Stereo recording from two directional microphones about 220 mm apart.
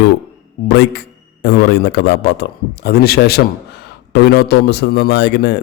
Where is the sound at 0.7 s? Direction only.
50° left (ahead or behind).